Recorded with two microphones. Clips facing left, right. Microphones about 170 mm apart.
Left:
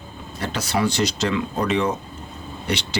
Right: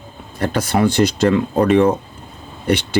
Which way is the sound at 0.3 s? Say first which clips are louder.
Right 6 dB; 55° right (ahead or behind).